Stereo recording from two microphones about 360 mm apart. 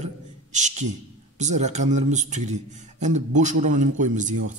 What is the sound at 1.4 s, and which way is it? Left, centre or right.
A man's voice, centre.